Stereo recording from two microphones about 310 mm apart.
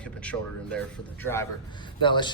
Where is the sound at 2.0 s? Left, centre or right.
Centre.